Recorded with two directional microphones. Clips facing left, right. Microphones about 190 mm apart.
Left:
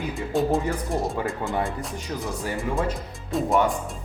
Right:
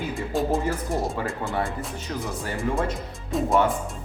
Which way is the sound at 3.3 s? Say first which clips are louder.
Even; centre (ahead or behind).